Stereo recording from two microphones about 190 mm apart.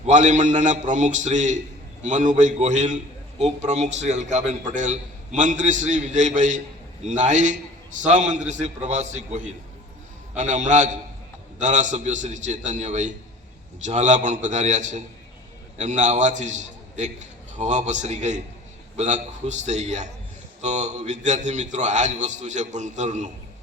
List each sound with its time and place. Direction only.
0.0 s a man's voice: 40° right (ahead or behind)